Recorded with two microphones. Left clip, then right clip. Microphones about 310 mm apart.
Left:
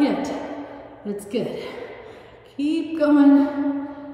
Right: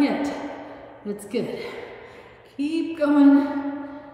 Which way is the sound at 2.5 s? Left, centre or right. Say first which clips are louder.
Left 2 dB; centre.